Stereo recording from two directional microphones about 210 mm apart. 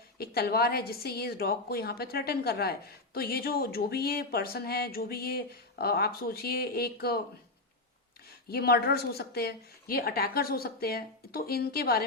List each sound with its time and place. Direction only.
0.2 s speech: 50° left (ahead or behind)
8.4 s speech: 50° left (ahead or behind)